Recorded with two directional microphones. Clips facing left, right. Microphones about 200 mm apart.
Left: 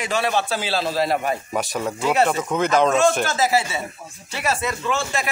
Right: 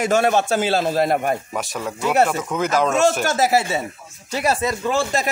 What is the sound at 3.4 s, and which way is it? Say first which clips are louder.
A man's voice: right 2 dB; 45° right (ahead or behind).